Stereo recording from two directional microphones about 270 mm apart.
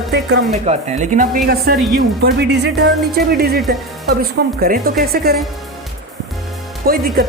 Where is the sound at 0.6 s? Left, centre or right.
Right.